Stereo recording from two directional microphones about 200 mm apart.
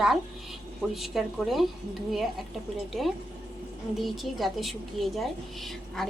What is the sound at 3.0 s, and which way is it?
A woman's voice, centre (ahead or behind).